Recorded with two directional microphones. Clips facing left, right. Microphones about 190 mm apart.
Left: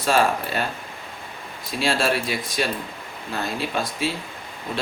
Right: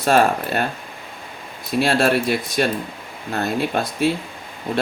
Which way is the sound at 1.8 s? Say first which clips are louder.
Right 5 dB; 55° right (ahead or behind).